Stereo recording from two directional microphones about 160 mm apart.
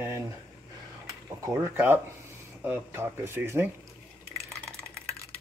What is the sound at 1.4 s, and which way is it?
Speech, 15° right (ahead or behind).